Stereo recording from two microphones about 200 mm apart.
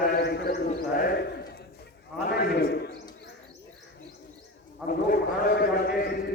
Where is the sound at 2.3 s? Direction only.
55° left (ahead or behind).